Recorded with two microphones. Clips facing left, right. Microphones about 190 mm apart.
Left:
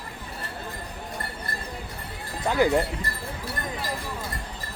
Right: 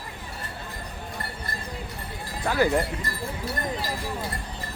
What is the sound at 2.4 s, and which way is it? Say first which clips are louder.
Speech: left 1 dB; 20° left (ahead or behind).